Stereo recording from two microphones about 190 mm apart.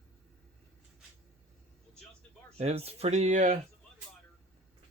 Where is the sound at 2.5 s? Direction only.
35° right (ahead or behind).